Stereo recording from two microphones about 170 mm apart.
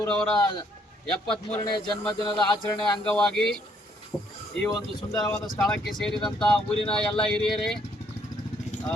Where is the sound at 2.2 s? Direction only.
30° left (ahead or behind).